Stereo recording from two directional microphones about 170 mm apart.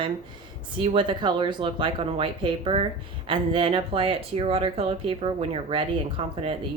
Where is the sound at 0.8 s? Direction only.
30° right (ahead or behind).